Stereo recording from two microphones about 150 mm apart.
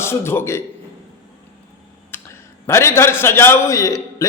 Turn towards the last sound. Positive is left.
turn(degrees=20)  # may be behind; listen again after turning